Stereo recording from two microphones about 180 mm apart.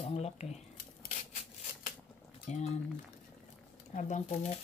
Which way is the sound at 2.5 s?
40° left (ahead or behind).